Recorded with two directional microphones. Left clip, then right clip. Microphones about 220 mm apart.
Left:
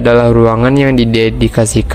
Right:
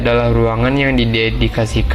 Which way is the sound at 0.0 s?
50° left (ahead or behind).